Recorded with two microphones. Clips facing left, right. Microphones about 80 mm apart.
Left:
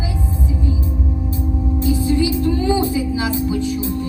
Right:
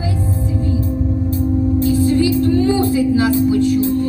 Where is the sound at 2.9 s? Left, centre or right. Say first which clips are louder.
Right 6 dB; right.